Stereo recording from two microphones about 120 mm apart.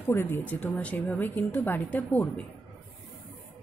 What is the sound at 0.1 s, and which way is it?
Speech, 20° left (ahead or behind).